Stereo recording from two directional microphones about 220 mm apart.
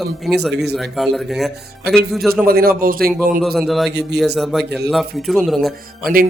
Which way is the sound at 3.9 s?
50° right (ahead or behind).